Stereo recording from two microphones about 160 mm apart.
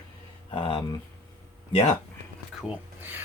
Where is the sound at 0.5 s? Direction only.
35° left (ahead or behind).